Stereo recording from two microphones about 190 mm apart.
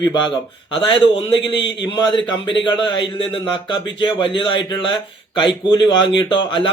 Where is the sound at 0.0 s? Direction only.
25° left (ahead or behind).